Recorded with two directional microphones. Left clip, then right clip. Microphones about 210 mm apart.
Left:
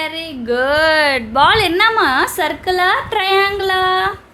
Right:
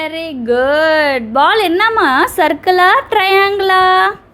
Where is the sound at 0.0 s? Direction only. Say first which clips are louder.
Right 3 dB; 10° right (ahead or behind).